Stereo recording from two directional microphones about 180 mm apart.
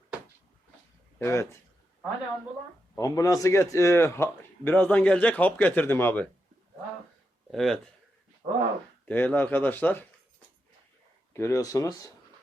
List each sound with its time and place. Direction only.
1.2 s a man's voice: 15° left (ahead or behind)
3.0 s a man's voice: 20° left (ahead or behind)
7.5 s speech: centre (ahead or behind)
8.4 s speech: 30° right (ahead or behind)
9.0 s a man's voice: 10° left (ahead or behind)
11.3 s a man's voice: 15° left (ahead or behind)